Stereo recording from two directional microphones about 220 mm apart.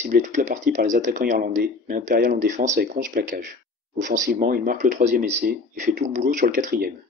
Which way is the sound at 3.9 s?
35° right (ahead or behind).